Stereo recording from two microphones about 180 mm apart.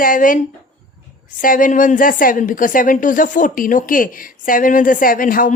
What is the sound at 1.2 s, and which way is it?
A woman's voice, 50° left (ahead or behind).